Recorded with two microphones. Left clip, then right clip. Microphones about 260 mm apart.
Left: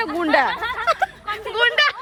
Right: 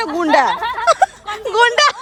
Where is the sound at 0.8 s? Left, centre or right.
Centre.